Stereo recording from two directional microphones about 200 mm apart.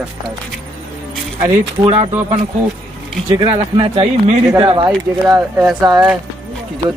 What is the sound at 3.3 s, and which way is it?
Speech, 25° right (ahead or behind).